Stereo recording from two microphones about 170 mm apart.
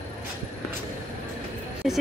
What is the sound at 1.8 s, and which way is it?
Speech, centre (ahead or behind).